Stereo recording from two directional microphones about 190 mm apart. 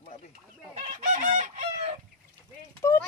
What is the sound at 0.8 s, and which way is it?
Chicken, 40° right (ahead or behind).